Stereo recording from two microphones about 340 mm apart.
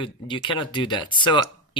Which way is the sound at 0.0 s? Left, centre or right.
Centre.